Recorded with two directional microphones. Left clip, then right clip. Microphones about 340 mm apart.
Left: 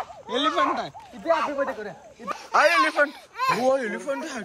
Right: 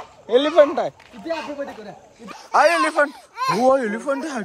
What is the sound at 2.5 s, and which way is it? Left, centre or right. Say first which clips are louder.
Speech: right 3 dB; right.